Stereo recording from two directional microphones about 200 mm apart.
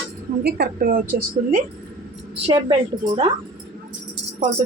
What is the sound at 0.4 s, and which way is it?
Speech, 50° right (ahead or behind).